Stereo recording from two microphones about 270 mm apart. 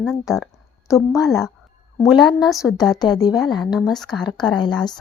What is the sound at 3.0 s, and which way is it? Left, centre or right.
Speech, centre.